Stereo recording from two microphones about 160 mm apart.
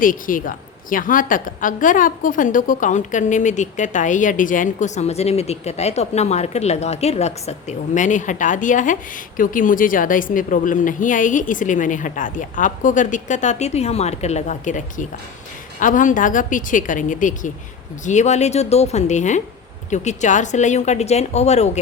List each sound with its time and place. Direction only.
0.0 s a woman's voice: 55° left (ahead or behind)